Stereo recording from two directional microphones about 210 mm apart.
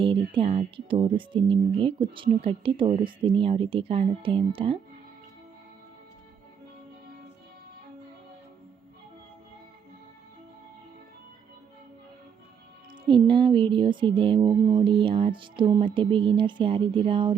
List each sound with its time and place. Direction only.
0.0 s speech: 25° right (ahead or behind)
13.1 s speech: 25° right (ahead or behind)